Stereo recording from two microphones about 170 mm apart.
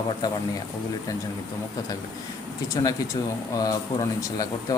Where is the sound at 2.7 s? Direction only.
20° left (ahead or behind).